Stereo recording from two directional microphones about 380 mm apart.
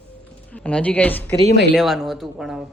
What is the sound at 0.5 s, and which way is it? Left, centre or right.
Speech, centre.